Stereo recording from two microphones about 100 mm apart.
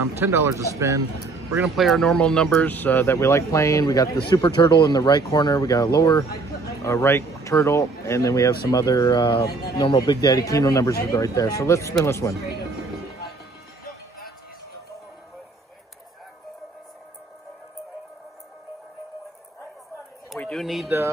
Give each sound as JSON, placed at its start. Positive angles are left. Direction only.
{"t": 0.2, "sound": "speech", "side_deg": -25}
{"t": 1.6, "sound": "speech", "side_deg": 0}
{"t": 4.4, "sound": "speech", "side_deg": 55}
{"t": 20.5, "sound": "speech", "side_deg": 0}